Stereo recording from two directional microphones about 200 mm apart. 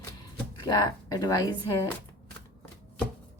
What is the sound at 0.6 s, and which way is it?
Speech, 20° left (ahead or behind).